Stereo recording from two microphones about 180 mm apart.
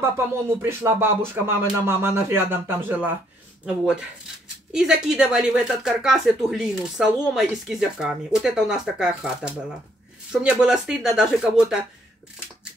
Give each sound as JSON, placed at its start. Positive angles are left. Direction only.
{"t": 0.6, "sound": "speech", "side_deg": -10}